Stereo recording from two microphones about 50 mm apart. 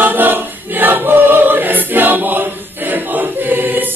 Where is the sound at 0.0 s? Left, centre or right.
Right.